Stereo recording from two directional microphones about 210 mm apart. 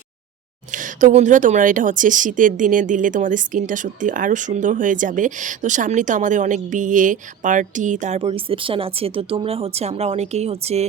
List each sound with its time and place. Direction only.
0.7 s speech: 40° right (ahead or behind)